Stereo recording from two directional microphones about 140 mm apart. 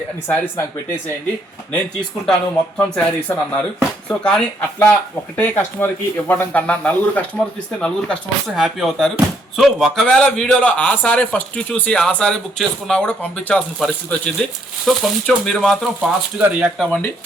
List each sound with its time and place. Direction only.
0.3 s speech: 15° left (ahead or behind)
1.7 s speech: 5° left (ahead or behind)
16.0 s speech: 10° right (ahead or behind)
16.7 s speech: 5° left (ahead or behind)